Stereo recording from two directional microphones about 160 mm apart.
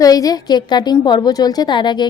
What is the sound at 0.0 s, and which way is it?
A woman's voice, 20° left (ahead or behind).